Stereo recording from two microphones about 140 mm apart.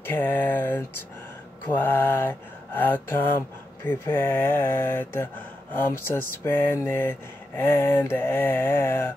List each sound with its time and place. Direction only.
0.0 s mantra: 15° left (ahead or behind)